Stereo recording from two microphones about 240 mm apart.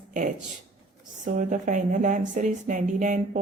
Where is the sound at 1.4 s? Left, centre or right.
Right.